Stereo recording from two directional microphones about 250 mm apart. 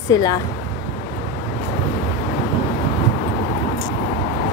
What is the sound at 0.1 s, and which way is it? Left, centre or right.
Speech, centre.